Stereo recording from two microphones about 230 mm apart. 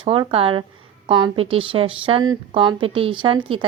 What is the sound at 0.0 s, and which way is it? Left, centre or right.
A woman's voice, right.